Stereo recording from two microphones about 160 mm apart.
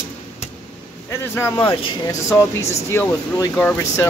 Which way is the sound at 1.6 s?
30° left (ahead or behind).